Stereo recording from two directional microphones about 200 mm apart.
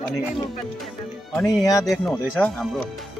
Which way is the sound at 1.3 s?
15° left (ahead or behind).